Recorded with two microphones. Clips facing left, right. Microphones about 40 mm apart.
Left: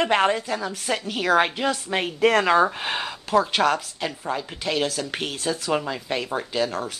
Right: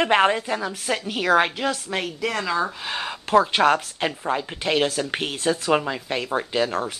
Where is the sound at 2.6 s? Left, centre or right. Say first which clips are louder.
Left 4 dB; left.